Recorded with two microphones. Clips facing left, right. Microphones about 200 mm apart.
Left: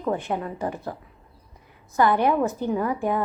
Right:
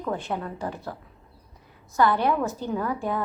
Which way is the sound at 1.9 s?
15° left (ahead or behind).